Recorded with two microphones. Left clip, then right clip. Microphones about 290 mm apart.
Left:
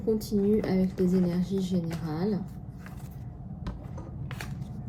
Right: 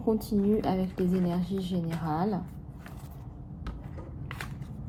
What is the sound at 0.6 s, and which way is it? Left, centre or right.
Speech, centre.